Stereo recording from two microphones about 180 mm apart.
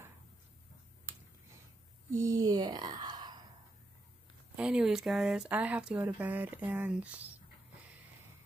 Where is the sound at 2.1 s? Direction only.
20° right (ahead or behind).